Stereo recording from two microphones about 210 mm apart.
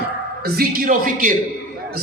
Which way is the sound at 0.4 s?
45° right (ahead or behind).